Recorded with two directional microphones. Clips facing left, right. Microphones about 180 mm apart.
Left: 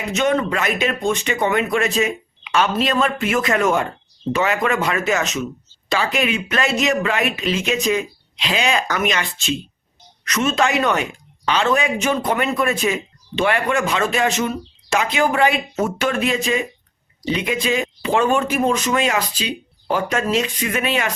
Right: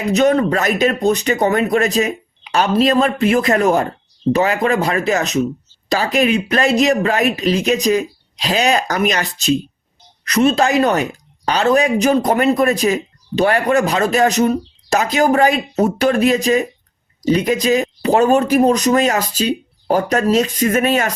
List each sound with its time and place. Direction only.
0.1 s speech: 35° right (ahead or behind)